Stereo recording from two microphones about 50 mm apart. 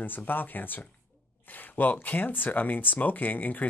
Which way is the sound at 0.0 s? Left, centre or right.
Left.